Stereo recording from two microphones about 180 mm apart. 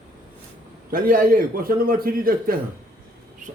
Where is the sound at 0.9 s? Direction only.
50° right (ahead or behind).